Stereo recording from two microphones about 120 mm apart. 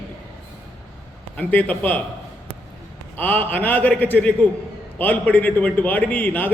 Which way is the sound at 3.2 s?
15° left (ahead or behind).